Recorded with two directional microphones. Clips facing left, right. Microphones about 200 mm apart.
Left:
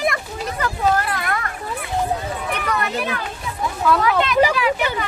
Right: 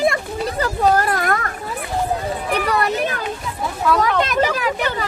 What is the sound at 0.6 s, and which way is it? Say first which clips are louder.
Speech: right 3 dB; 40° right (ahead or behind).